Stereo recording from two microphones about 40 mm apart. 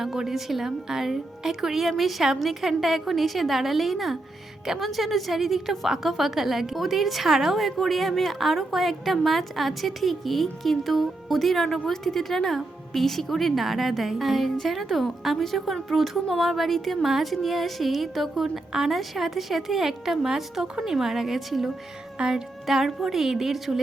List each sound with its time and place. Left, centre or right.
0.0 s a woman's voice: centre
22.2 s speech: centre
22.6 s a woman's voice: centre